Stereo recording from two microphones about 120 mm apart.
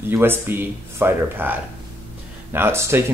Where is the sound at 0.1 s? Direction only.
20° right (ahead or behind).